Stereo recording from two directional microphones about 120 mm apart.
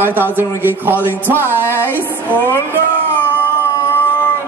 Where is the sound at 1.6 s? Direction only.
20° left (ahead or behind).